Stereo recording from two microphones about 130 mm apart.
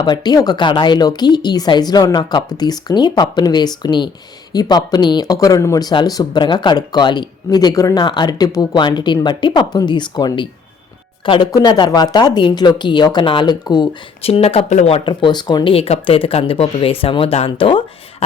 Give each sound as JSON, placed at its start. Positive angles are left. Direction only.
{"t": 0.0, "sound": "speech", "side_deg": 35}
{"t": 14.2, "sound": "speech", "side_deg": 50}
{"t": 15.0, "sound": "speech", "side_deg": 35}
{"t": 15.7, "sound": "speech", "side_deg": 50}